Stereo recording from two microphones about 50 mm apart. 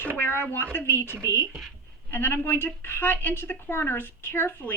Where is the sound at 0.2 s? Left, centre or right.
Left.